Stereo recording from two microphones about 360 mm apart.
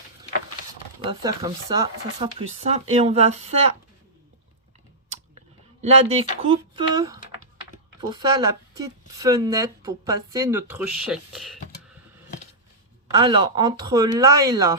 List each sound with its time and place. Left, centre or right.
1.2 s speech: centre
5.8 s speech: centre
13.1 s speech: centre